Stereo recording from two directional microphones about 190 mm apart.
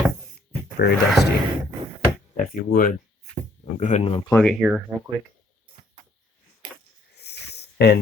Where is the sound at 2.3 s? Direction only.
50° left (ahead or behind).